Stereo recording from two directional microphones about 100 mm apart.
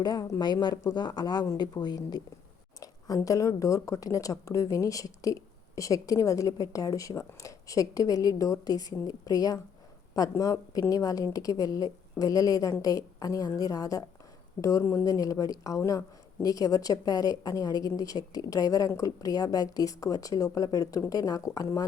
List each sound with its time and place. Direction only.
0.0 s a woman's voice: 40° left (ahead or behind)
3.2 s a woman's voice: 35° left (ahead or behind)